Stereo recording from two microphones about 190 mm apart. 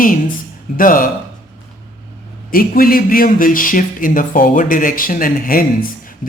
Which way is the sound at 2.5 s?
50° left (ahead or behind).